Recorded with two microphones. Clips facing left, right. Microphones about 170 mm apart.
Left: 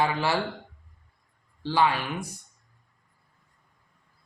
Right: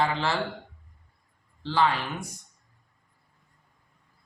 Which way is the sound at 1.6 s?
10° left (ahead or behind).